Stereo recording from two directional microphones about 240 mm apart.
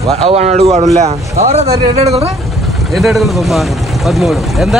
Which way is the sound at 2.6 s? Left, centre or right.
Centre.